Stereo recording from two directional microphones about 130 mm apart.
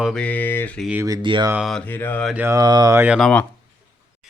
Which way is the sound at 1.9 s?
15° left (ahead or behind).